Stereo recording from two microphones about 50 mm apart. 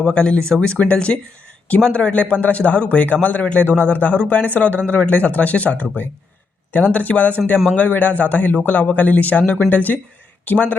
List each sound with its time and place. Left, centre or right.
0.0 s a man's voice: left
6.9 s a man's voice: left